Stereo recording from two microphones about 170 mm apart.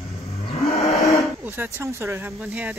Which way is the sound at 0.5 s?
35° left (ahead or behind).